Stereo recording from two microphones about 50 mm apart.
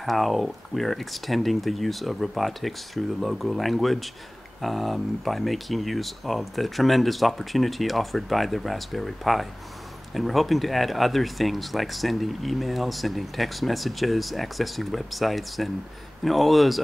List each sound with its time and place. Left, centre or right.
0.0 s speech: centre